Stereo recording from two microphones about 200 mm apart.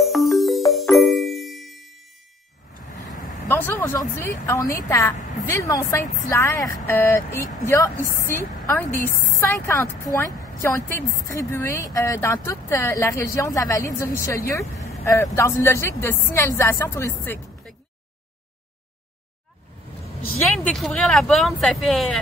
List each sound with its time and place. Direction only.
0.0 s music: centre (ahead or behind)
3.4 s a sound: 10° left (ahead or behind)
4.2 s speech: 15° left (ahead or behind)
8.0 s a woman's voice: 45° left (ahead or behind)
8.3 s speech: 10° left (ahead or behind)
20.3 s speech: 5° left (ahead or behind)